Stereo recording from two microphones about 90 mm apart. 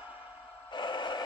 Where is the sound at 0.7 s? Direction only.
60° left (ahead or behind).